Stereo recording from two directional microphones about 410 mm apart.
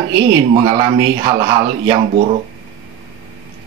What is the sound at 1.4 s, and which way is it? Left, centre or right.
Speech, centre.